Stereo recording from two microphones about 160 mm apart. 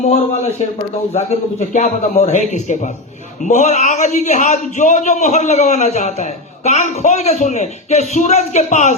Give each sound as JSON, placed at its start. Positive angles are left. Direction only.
{"t": 1.1, "sound": "a man's voice", "side_deg": 50}